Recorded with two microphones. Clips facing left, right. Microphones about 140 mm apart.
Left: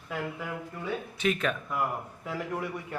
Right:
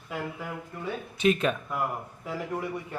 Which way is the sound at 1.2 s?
20° right (ahead or behind).